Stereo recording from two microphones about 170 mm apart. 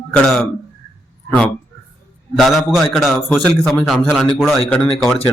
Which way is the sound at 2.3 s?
Centre (ahead or behind).